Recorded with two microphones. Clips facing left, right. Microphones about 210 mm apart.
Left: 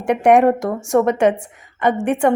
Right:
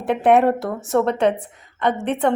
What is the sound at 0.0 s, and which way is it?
Speech, 15° left (ahead or behind).